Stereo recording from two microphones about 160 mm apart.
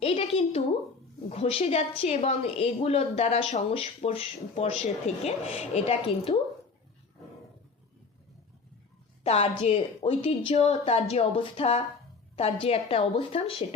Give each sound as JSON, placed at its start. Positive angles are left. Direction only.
{"t": 0.0, "sound": "a woman's voice", "side_deg": 35}
{"t": 9.2, "sound": "a woman's voice", "side_deg": 40}